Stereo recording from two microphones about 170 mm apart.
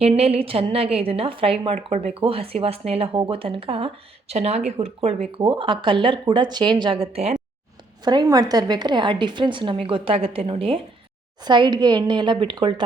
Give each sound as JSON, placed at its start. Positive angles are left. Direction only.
{"t": 0.0, "sound": "a woman's voice", "side_deg": -35}
{"t": 8.0, "sound": "a woman's voice", "side_deg": -25}